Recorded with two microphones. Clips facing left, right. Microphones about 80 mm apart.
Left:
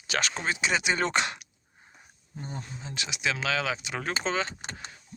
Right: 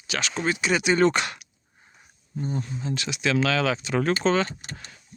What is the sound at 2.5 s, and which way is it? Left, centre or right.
Speech, centre.